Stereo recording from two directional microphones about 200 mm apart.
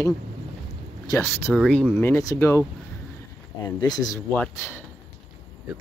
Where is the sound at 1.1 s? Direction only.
20° left (ahead or behind).